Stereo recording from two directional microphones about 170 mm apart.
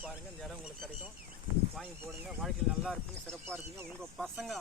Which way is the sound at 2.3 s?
Centre (ahead or behind).